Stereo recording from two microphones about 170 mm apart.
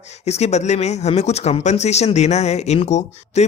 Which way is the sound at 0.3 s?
40° left (ahead or behind).